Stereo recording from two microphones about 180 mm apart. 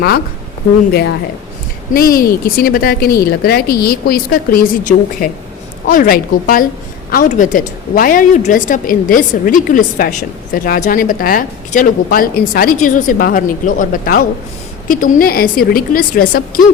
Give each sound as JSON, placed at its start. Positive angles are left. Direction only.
{"t": 1.9, "sound": "a woman's voice", "side_deg": 55}